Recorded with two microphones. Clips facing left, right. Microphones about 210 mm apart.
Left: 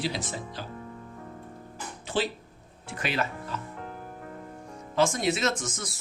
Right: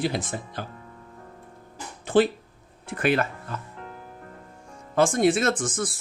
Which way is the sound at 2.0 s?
55° right (ahead or behind).